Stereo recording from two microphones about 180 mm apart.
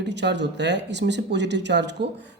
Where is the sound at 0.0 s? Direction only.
70° right (ahead or behind).